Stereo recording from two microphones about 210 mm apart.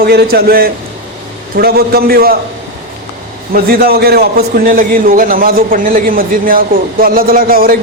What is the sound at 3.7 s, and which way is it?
A man's voice, 45° right (ahead or behind).